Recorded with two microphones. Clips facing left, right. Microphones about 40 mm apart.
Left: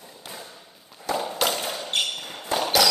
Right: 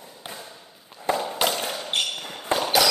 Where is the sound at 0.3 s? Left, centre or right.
Centre.